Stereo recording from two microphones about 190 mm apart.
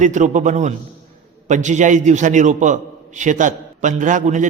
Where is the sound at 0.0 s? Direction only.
40° right (ahead or behind).